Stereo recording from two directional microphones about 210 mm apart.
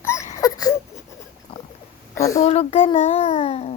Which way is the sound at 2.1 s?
15° left (ahead or behind).